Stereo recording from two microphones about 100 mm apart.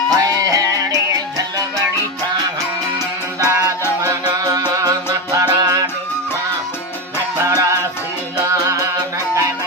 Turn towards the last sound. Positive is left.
turn(degrees=-35)  # may be behind; listen again after turning